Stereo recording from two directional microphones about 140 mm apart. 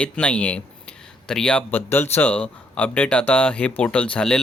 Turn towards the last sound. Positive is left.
turn(degrees=5)  # may be behind; listen again after turning